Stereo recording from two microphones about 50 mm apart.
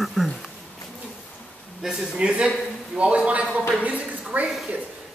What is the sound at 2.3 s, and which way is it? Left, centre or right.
Speech, right.